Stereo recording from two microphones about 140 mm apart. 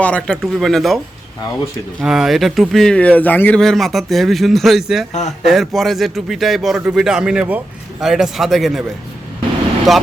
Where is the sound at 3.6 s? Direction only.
Centre (ahead or behind).